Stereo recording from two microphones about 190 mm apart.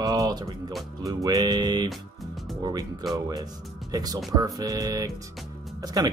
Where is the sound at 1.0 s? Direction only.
20° right (ahead or behind).